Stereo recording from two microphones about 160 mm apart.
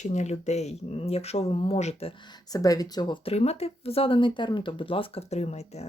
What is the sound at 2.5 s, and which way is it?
Speech, 25° left (ahead or behind).